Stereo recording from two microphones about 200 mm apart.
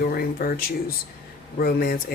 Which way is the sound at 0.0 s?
50° left (ahead or behind).